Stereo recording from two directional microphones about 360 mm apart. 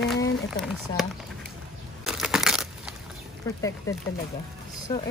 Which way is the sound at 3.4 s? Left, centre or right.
Centre.